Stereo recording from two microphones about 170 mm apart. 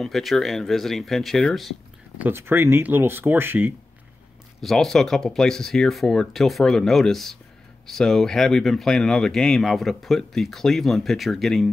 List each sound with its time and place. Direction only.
0.0 s speech: centre (ahead or behind)
2.1 s speech: 10° right (ahead or behind)
4.6 s speech: centre (ahead or behind)